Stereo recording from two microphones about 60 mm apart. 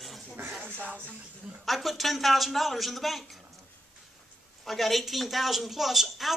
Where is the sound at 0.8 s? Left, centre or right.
Right.